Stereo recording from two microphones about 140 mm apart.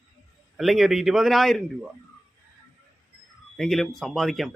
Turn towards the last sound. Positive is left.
turn(degrees=0)  # may be behind; listen again after turning